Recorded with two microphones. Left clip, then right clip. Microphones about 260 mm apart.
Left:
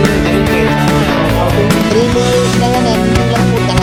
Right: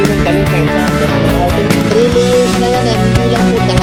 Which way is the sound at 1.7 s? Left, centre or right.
Centre.